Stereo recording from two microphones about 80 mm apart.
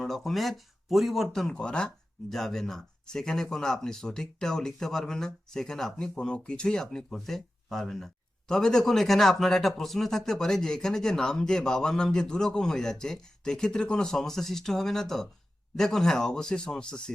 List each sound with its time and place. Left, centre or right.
0.0 s speech: centre